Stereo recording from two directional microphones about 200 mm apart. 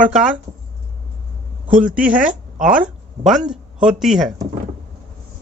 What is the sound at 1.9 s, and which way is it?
Speech, 5° right (ahead or behind).